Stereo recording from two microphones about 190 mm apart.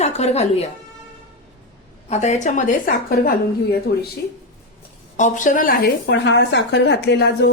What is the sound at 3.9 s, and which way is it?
Speech, 60° left (ahead or behind).